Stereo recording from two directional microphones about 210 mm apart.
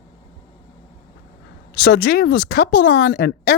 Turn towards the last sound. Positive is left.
turn(degrees=50)  # may be behind; listen again after turning